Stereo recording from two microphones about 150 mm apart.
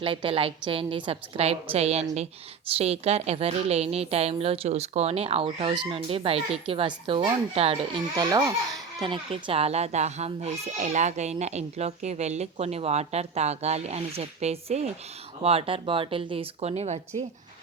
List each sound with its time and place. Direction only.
0.0 s a woman's voice: 35° right (ahead or behind)
8.1 s a woman's voice: 30° right (ahead or behind); by 17.2 s 50° right (ahead or behind)